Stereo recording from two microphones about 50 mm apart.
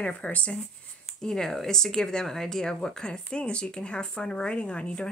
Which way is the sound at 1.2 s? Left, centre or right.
Centre.